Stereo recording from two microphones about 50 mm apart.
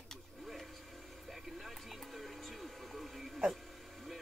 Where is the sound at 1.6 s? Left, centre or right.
Centre.